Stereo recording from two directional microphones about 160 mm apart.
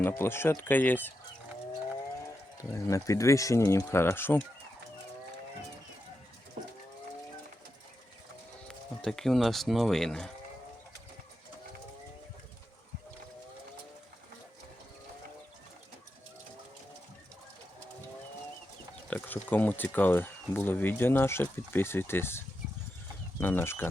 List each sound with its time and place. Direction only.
0.1 s speech: 15° left (ahead or behind)
2.6 s speech: 20° left (ahead or behind)
8.6 s speech: 5° left (ahead or behind)
19.1 s speech: 10° left (ahead or behind)